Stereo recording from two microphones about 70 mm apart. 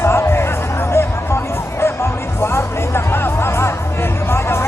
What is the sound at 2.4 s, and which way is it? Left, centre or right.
Music, left.